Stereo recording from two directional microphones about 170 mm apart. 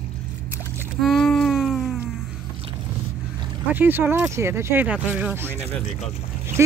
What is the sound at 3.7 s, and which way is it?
Speech, 10° right (ahead or behind).